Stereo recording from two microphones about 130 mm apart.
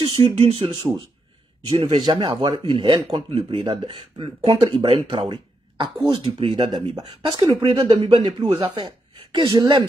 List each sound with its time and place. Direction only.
0.0 s a man's voice: 45° right (ahead or behind)
9.3 s a man's voice: 35° right (ahead or behind)